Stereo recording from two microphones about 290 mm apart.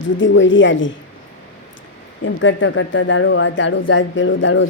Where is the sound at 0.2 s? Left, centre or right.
Left.